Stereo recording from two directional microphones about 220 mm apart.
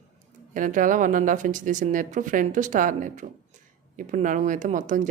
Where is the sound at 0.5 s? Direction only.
35° right (ahead or behind).